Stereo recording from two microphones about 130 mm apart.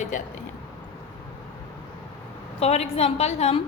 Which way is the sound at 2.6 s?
55° left (ahead or behind).